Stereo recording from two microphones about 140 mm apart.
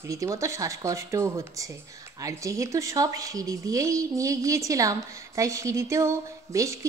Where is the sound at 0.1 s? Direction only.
20° right (ahead or behind).